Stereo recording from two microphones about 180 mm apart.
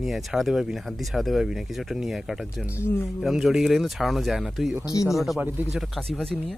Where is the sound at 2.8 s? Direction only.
15° left (ahead or behind).